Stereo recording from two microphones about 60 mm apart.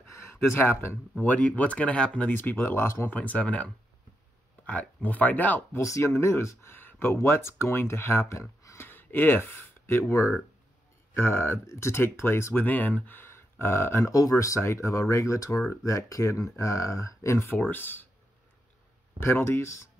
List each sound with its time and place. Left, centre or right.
0.0 s a sound: left
1.2 s speech: left
2.2 s speech: left
3.1 s speech: left
5.8 s speech: left
6.8 s speech: left
8.8 s speech: left
11.1 s speech: left
12.6 s speech: left
13.2 s a sound: left
14.3 s speech: left
17.5 s speech: left
19.1 s speech: left